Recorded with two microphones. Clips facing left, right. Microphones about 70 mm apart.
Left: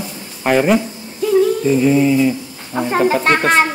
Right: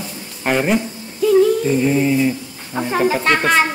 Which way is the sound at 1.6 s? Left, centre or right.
Centre.